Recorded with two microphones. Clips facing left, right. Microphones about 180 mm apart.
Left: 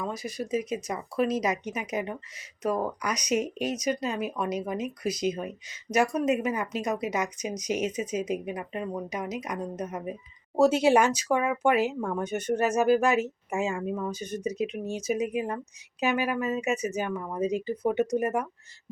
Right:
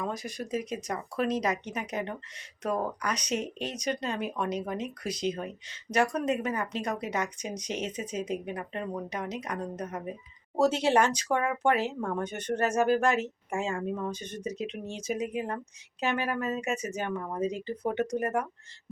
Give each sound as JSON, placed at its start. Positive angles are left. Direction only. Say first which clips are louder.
{"t": 0.1, "sound": "speech", "louder": "left 3 dB", "side_deg": 0}